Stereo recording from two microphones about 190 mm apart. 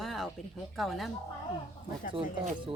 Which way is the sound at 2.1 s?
30° right (ahead or behind).